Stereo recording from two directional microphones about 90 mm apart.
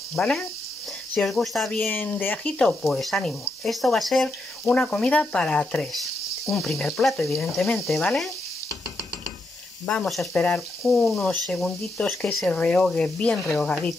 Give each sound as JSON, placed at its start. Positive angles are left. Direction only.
{"t": 0.1, "sound": "speech", "side_deg": 10}
{"t": 1.9, "sound": "speech", "side_deg": 20}
{"t": 2.8, "sound": "speech", "side_deg": 0}
{"t": 9.8, "sound": "speech", "side_deg": 5}